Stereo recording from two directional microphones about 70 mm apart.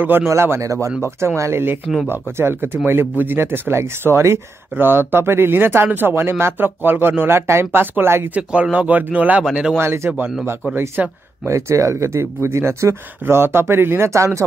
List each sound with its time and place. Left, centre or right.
0.3 s speech: right
8.4 s speech: centre
9.4 s speech: centre
9.8 s speech: right
10.7 s speech: right
11.4 s speech: right